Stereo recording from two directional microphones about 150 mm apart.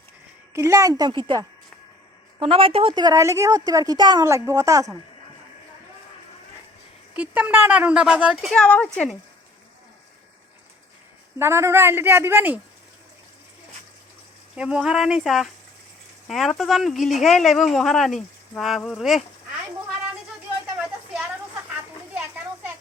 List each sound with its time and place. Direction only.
0.5 s a woman's voice: 20° right (ahead or behind)
2.4 s a woman's voice: 40° right (ahead or behind); by 4.9 s 20° right (ahead or behind)
7.1 s speech: 10° right (ahead or behind)
11.3 s speech: 15° right (ahead or behind)
14.5 s speech: 5° right (ahead or behind)